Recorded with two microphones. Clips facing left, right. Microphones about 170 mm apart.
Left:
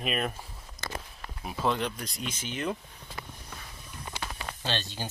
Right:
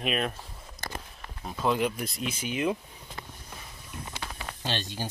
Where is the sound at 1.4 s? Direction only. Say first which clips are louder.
Even; 10° left (ahead or behind).